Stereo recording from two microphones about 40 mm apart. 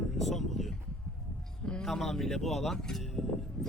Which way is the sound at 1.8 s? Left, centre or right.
Centre.